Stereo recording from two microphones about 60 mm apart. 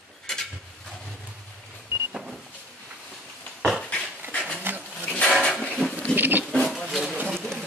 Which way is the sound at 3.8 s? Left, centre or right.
Centre.